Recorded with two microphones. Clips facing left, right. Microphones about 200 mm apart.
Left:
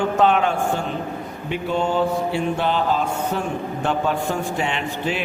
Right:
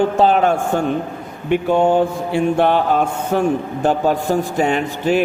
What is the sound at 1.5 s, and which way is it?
Mantra, 55° right (ahead or behind).